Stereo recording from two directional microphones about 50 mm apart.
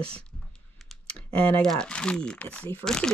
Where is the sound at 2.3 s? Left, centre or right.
Left.